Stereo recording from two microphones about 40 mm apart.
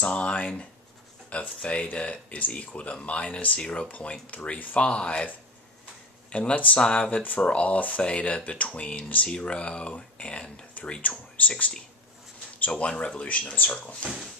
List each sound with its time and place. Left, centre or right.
0.0 s speech: left
4.7 s speech: left
6.3 s speech: left
10.7 s speech: left